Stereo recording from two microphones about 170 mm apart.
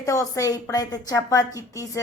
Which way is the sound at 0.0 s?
20° left (ahead or behind).